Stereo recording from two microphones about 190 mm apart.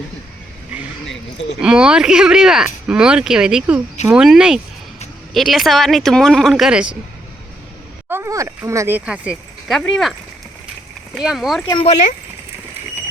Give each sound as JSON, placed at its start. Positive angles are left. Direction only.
{"t": 1.6, "sound": "speech", "side_deg": -5}
{"t": 8.1, "sound": "speech", "side_deg": -15}
{"t": 11.7, "sound": "speech", "side_deg": 30}